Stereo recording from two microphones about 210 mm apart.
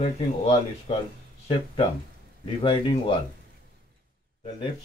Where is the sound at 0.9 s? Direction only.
25° left (ahead or behind).